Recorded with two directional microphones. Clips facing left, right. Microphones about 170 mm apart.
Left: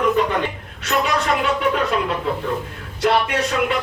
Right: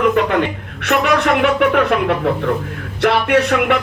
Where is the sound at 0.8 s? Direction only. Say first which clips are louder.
Right 5 dB; 65° right (ahead or behind).